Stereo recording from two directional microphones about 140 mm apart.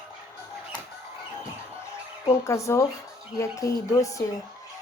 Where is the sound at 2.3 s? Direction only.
20° left (ahead or behind).